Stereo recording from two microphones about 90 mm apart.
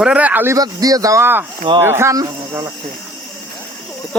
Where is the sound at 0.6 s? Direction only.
45° right (ahead or behind).